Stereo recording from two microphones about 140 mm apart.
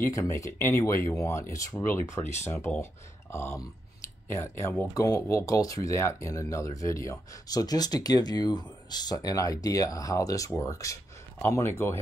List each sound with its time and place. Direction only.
0.1 s speech: 20° left (ahead or behind)